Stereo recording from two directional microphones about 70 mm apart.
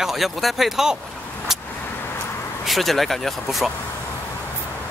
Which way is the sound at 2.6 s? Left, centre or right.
Centre.